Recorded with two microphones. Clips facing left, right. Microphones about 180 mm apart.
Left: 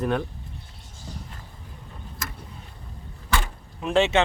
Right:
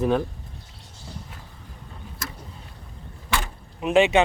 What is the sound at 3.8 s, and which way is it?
Speech, 15° right (ahead or behind).